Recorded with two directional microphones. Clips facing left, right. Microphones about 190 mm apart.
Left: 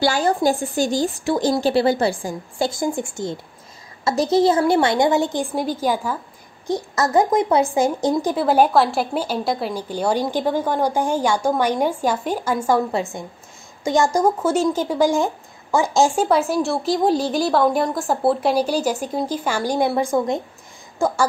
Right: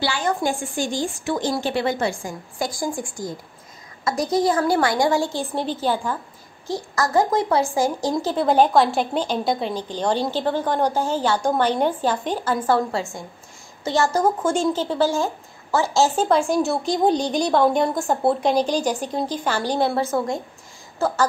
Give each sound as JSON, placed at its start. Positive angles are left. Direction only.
{"t": 0.0, "sound": "a woman's voice", "side_deg": 40}